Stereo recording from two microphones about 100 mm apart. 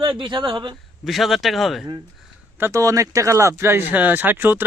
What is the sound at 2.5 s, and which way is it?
Speech, 25° right (ahead or behind).